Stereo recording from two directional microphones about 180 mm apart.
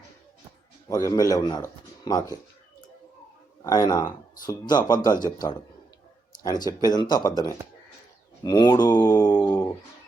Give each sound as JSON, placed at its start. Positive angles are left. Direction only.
{"t": 0.9, "sound": "speech", "side_deg": 20}
{"t": 3.6, "sound": "speech", "side_deg": 20}
{"t": 8.9, "sound": "a sound", "side_deg": 15}